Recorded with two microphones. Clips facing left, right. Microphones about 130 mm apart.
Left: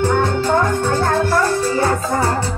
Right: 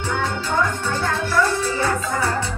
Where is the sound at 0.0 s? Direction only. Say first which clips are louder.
Left 8 dB; 50° left (ahead or behind).